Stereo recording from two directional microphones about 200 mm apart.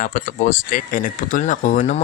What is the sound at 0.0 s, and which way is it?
Speech, 40° left (ahead or behind).